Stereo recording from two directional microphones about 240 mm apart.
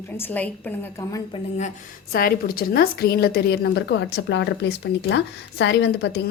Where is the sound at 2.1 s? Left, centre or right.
Left.